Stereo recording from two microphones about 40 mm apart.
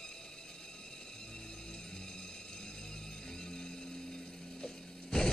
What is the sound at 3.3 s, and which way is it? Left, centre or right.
Music, centre.